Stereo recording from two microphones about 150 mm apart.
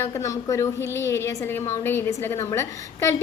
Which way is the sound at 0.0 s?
20° left (ahead or behind).